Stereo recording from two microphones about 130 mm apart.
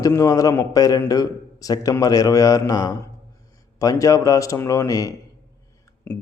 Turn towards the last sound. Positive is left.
turn(degrees=15)  # may be behind; listen again after turning